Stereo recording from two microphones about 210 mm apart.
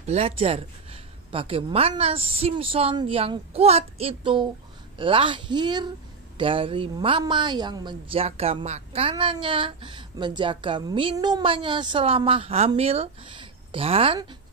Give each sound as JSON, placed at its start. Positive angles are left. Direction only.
{"t": 0.0, "sound": "a woman's voice", "side_deg": -30}